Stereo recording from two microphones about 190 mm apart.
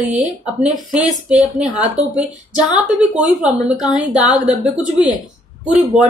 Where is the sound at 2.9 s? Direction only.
5° right (ahead or behind).